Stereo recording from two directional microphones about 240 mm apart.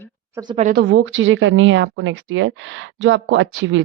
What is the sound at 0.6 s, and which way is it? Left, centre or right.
Speech, right.